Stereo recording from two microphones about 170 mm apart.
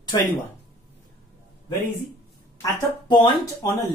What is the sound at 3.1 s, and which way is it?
Speech, 25° left (ahead or behind).